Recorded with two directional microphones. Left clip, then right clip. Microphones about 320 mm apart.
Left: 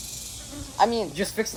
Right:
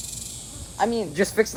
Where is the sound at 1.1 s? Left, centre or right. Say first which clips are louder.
Right 6 dB; centre.